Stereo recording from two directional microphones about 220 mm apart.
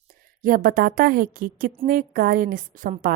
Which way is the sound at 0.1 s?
40° right (ahead or behind).